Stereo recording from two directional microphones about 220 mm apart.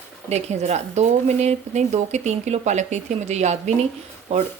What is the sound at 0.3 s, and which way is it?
Speech, 30° right (ahead or behind).